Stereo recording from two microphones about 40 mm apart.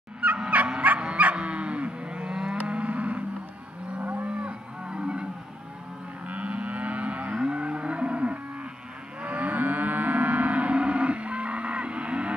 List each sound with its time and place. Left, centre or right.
0.2 s fowl: right
0.8 s cattle: right
2.6 s livestock: right
4.0 s livestock: right
4.3 s cattle: right
6.2 s moo: right
9.2 s livestock: right